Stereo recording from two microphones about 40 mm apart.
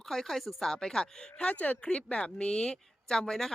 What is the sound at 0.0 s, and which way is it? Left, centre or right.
Speech, centre.